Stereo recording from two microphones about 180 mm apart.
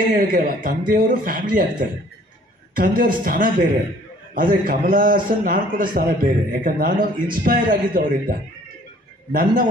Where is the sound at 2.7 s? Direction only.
50° right (ahead or behind).